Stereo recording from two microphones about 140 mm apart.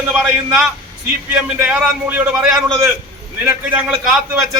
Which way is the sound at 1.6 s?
5° right (ahead or behind).